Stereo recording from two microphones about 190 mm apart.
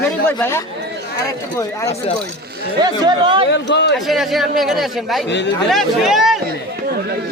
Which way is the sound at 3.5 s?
65° left (ahead or behind).